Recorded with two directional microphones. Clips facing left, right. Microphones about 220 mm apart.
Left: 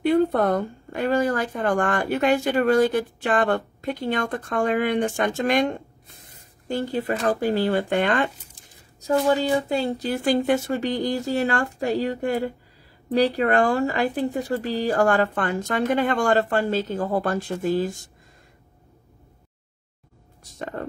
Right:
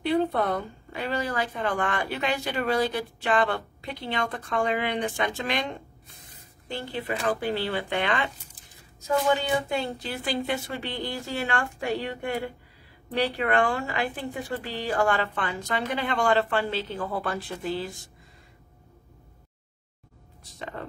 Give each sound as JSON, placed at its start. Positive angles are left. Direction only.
{"t": 0.0, "sound": "speech", "side_deg": 50}
{"t": 9.0, "sound": "a woman's voice", "side_deg": 35}
{"t": 20.5, "sound": "speech", "side_deg": 45}